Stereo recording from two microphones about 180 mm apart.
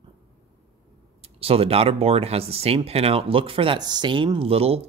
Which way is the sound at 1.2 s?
30° right (ahead or behind).